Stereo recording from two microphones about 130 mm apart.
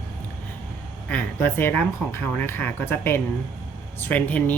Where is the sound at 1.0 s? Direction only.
15° left (ahead or behind).